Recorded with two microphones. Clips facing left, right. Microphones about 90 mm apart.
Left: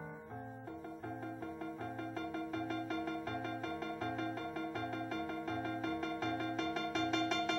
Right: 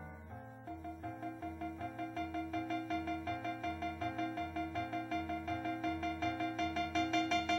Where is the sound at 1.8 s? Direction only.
40° left (ahead or behind).